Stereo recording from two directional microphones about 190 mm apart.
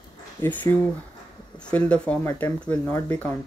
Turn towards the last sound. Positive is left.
turn(degrees=5)  # may be behind; listen again after turning